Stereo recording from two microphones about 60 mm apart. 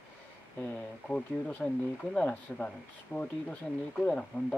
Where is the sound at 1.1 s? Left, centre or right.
Left.